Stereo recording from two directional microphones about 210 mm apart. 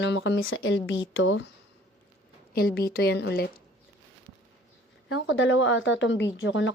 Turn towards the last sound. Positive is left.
turn(degrees=60)  # may be behind; listen again after turning